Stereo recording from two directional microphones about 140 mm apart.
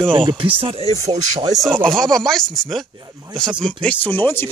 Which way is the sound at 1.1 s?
30° right (ahead or behind).